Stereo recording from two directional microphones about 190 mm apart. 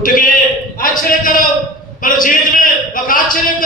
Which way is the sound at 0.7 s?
50° left (ahead or behind).